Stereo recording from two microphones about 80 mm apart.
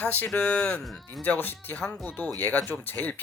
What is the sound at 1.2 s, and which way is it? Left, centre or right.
Speech, left.